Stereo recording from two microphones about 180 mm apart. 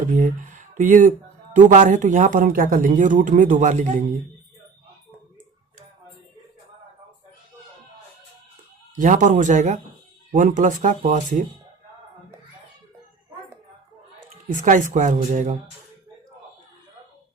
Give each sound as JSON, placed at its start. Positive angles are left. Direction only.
{"t": 0.1, "sound": "speech", "side_deg": -45}
{"t": 9.0, "sound": "speech", "side_deg": -45}
{"t": 14.5, "sound": "speech", "side_deg": -45}